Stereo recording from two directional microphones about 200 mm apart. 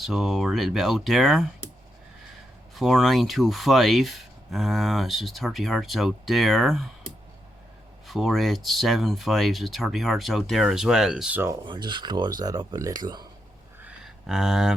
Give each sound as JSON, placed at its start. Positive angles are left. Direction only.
{"t": 0.0, "sound": "speech", "side_deg": 0}
{"t": 2.7, "sound": "speech", "side_deg": 0}
{"t": 8.0, "sound": "speech", "side_deg": 0}
{"t": 11.6, "sound": "speech", "side_deg": -25}
{"t": 14.0, "sound": "speech", "side_deg": 0}